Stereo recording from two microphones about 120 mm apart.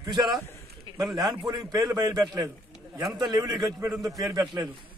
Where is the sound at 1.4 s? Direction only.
35° right (ahead or behind).